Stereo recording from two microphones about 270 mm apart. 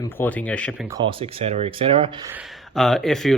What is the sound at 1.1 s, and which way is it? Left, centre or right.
Speech, right.